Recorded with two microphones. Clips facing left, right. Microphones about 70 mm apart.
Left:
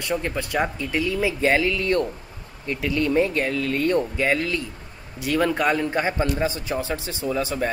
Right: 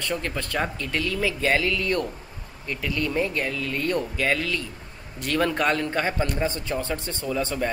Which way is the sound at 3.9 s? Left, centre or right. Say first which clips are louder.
Left 1 dB; left.